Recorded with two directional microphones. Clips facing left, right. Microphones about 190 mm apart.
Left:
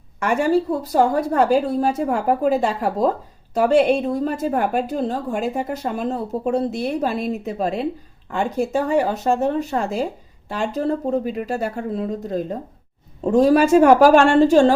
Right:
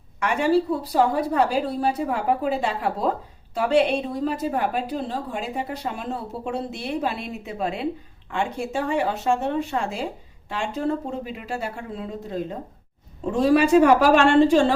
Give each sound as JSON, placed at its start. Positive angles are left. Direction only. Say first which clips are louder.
{"t": 0.2, "sound": "a woman's voice", "louder": "left 2 dB", "side_deg": 45}